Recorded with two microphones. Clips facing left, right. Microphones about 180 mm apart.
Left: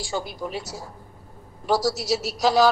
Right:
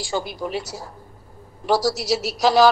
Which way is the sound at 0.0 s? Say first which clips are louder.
Right 3 dB; 85° right.